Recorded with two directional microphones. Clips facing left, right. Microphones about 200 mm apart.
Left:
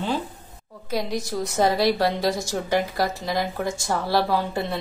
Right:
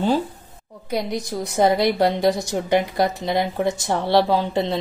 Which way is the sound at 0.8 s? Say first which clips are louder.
Right 2 dB; 15° right (ahead or behind).